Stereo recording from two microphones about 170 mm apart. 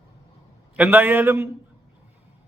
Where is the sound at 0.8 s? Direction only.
10° right (ahead or behind).